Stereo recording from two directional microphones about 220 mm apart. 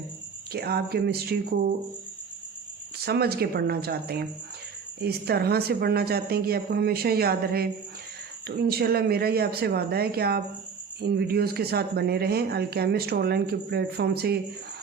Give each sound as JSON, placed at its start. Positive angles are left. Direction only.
{"t": 0.5, "sound": "speech", "side_deg": -45}
{"t": 3.0, "sound": "speech", "side_deg": -45}